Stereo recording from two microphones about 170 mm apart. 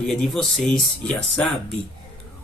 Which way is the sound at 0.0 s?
Centre (ahead or behind).